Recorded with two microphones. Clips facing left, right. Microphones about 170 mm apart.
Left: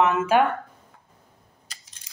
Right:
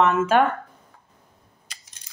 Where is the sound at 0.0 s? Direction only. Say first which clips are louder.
Right 1 dB; 15° left (ahead or behind).